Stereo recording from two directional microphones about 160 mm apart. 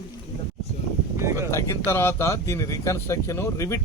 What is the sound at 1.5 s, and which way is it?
Speech, 15° left (ahead or behind).